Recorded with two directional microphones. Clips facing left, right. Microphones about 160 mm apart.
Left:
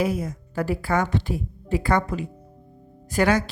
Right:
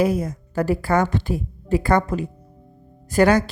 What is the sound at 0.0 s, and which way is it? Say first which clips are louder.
A woman's voice: right 4 dB; 40° right (ahead or behind).